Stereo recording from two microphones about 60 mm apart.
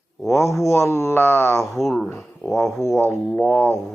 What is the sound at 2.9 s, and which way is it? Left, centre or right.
Music, left.